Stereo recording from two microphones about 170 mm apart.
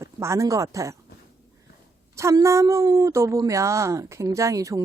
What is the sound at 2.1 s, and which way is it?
Speech, 15° right (ahead or behind).